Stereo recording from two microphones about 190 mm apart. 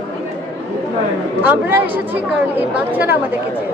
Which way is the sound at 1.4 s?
10° right (ahead or behind).